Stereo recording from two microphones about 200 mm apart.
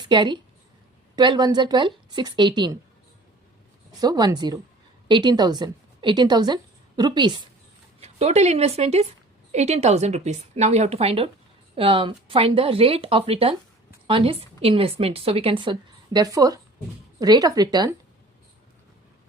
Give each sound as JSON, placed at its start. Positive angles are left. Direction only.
{"t": 0.0, "sound": "a woman's voice", "side_deg": -25}
{"t": 4.0, "sound": "a woman's voice", "side_deg": -20}